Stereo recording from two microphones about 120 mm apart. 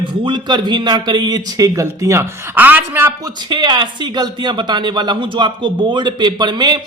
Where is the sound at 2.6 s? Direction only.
15° right (ahead or behind).